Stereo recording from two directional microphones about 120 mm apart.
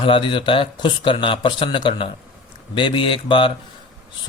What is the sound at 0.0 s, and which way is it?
Speech, 45° left (ahead or behind).